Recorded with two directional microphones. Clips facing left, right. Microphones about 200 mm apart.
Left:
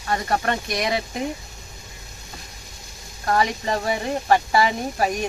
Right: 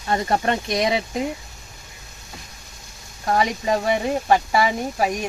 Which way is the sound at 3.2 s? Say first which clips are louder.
Right 1 dB; 15° right (ahead or behind).